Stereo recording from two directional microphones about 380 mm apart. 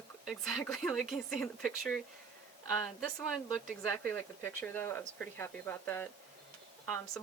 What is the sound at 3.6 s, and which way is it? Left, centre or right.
Speech, centre.